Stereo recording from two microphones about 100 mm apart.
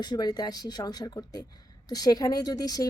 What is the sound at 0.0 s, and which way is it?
A woman's voice, 45° left (ahead or behind).